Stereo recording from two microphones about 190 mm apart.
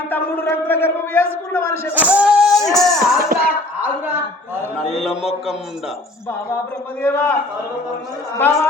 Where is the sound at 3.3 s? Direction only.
50° right (ahead or behind).